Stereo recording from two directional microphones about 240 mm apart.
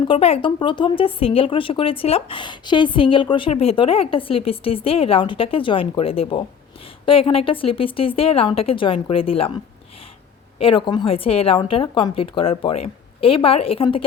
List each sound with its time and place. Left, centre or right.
0.1 s speech: left
10.6 s speech: left